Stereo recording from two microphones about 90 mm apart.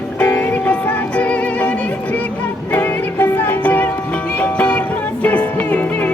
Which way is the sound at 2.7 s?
20° left (ahead or behind).